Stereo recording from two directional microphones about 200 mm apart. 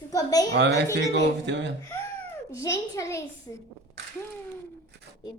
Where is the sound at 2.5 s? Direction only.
15° left (ahead or behind).